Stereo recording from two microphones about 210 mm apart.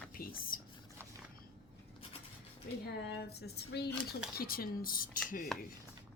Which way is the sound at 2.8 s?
50° left (ahead or behind).